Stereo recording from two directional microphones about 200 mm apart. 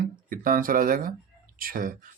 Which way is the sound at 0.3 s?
45° right (ahead or behind).